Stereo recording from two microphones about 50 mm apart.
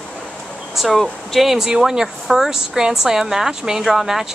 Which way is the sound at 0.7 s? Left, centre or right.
Centre.